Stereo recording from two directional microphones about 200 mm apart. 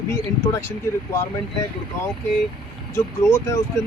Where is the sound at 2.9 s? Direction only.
15° left (ahead or behind).